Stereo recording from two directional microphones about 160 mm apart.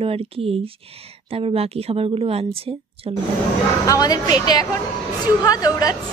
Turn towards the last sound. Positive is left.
turn(degrees=25)  # may be behind; listen again after turning